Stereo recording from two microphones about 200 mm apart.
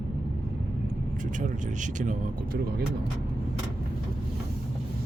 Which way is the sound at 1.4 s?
40° right (ahead or behind).